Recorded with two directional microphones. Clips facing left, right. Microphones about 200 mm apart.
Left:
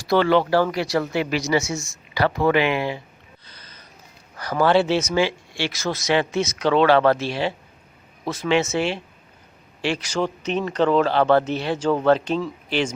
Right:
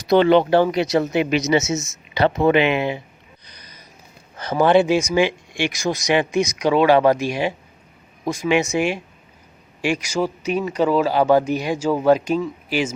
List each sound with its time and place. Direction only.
0.0 s speech: 20° right (ahead or behind)
3.4 s gasp: 15° right (ahead or behind)
4.4 s speech: 20° right (ahead or behind)